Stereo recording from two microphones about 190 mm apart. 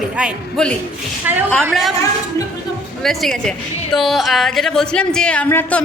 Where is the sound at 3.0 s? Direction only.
Centre (ahead or behind).